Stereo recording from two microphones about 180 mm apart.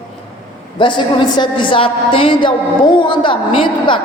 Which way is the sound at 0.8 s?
25° left (ahead or behind).